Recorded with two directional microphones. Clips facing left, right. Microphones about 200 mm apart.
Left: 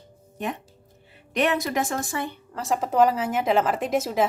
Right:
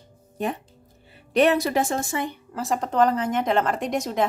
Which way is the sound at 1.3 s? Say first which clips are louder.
Right 4 dB; 35° right (ahead or behind).